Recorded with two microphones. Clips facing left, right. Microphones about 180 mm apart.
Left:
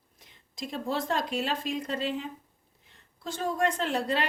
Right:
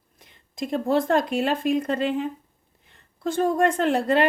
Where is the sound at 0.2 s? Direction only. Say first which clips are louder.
Right 8 dB; 55° right (ahead or behind).